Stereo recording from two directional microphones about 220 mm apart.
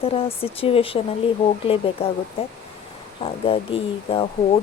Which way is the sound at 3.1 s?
25° left (ahead or behind).